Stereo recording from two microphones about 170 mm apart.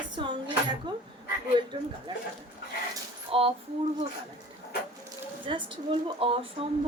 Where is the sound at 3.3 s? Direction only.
35° right (ahead or behind).